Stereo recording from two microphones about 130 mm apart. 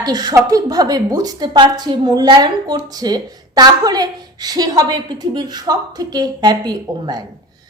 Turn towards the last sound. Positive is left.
turn(degrees=-30)  # may be behind; listen again after turning